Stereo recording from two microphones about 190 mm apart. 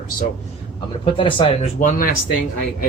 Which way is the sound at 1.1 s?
25° left (ahead or behind).